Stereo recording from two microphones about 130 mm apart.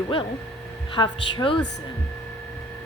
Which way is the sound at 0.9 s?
40° left (ahead or behind).